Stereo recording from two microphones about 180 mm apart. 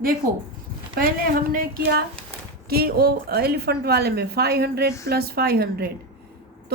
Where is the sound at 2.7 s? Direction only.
60° right (ahead or behind).